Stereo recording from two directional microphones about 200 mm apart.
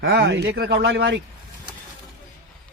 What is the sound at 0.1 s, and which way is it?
Speech, 60° right (ahead or behind).